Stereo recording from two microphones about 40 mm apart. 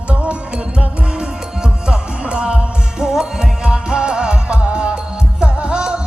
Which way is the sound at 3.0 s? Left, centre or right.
Centre.